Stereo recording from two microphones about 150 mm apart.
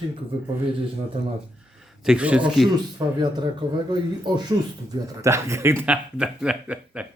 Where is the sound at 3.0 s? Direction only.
25° right (ahead or behind).